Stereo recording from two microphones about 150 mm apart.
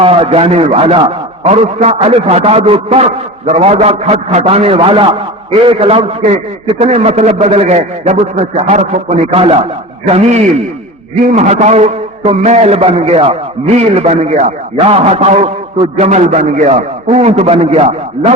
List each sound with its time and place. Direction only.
0.0 s a man's voice: 40° right (ahead or behind)